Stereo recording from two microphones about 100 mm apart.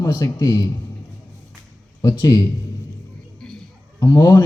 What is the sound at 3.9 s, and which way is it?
Speech, 30° left (ahead or behind).